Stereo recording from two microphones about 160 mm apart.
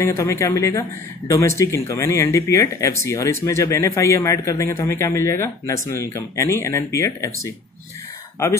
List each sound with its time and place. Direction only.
0.0 s speech: 20° left (ahead or behind)